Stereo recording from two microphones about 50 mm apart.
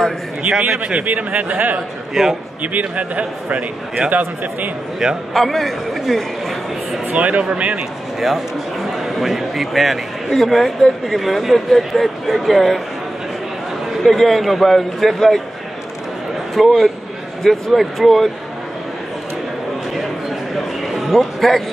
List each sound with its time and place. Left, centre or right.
0.7 s a man's voice: right
2.2 s a man's voice: centre
2.6 s a man's voice: right
5.3 s a man's voice: centre
7.2 s a man's voice: right
8.2 s a man's voice: centre
14.0 s a man's voice: centre
16.5 s a man's voice: centre
20.8 s a sound: centre